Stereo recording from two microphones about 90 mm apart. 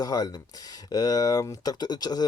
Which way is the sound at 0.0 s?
45° left (ahead or behind).